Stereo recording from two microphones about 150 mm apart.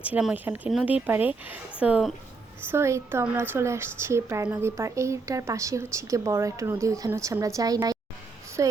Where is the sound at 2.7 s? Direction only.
20° right (ahead or behind).